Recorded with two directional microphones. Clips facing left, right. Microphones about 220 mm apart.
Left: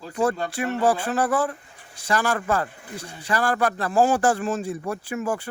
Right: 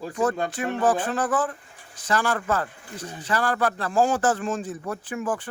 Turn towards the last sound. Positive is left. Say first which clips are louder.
# left 1 dB
turn(degrees=10)  # may be behind; listen again after turning